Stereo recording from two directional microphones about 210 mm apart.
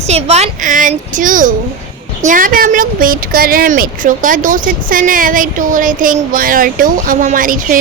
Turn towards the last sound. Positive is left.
turn(degrees=-40)  # may be behind; listen again after turning